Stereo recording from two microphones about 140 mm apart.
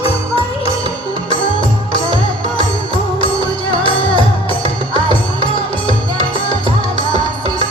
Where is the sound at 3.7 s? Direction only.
40° left (ahead or behind).